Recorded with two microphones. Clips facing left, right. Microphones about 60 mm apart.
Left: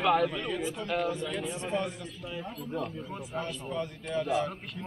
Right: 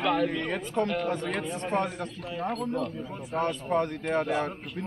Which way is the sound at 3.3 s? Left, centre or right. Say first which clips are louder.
Right 8 dB; right.